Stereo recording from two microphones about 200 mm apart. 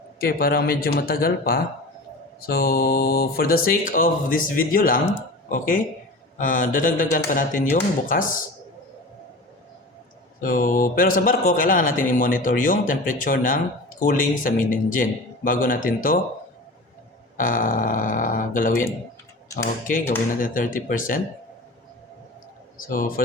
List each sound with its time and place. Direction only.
0.2 s speech: 50° left (ahead or behind)
10.4 s speech: 45° left (ahead or behind)
17.3 s speech: 40° left (ahead or behind)
19.9 s speech: 40° left (ahead or behind)
22.8 s speech: 45° left (ahead or behind)